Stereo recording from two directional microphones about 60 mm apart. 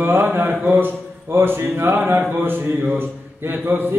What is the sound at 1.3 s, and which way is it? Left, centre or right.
Speech, right.